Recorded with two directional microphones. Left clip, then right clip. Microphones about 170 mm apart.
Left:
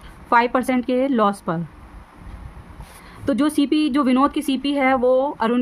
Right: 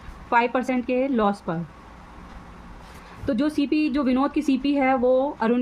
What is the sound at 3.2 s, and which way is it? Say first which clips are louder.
Speech: left 4 dB; 45° left (ahead or behind).